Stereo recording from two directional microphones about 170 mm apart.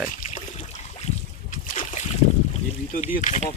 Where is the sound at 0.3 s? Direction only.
45° left (ahead or behind).